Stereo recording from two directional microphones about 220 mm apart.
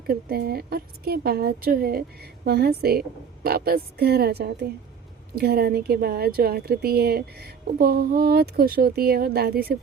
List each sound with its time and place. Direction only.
0.1 s a woman's voice: 45° right (ahead or behind)